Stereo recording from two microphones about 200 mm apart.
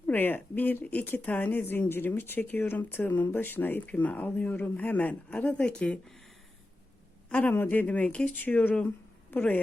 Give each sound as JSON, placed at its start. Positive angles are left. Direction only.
{"t": 0.1, "sound": "speech", "side_deg": 10}
{"t": 7.3, "sound": "speech", "side_deg": 10}